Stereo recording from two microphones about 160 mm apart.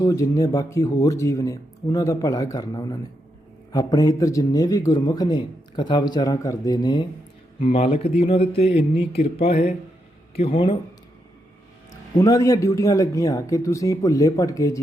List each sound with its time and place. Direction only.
0.0 s a man's voice: 20° left (ahead or behind)
7.6 s speech: 40° left (ahead or behind)
12.1 s speech: 20° left (ahead or behind)